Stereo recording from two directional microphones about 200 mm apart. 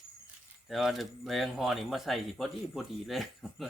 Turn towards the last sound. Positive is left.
turn(degrees=0)  # may be behind; listen again after turning